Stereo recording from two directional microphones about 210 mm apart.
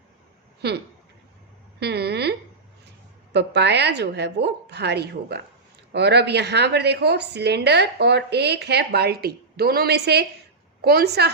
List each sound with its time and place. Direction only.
0.6 s a woman's voice: 50° right (ahead or behind)
1.8 s a sound: 50° right (ahead or behind)
3.3 s a woman's voice: 55° right (ahead or behind)